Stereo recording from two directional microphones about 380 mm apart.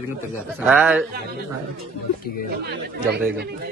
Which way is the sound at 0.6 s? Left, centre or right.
Centre.